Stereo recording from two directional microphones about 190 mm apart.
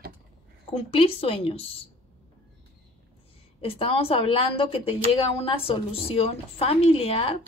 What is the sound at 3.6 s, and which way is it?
A woman's voice, 30° left (ahead or behind).